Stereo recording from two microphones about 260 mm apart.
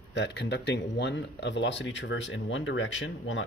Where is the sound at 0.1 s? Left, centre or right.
Left.